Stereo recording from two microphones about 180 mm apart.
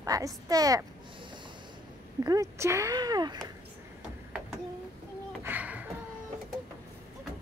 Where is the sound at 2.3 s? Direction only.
15° right (ahead or behind).